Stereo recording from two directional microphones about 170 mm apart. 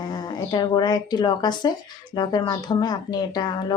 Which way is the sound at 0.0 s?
25° left (ahead or behind).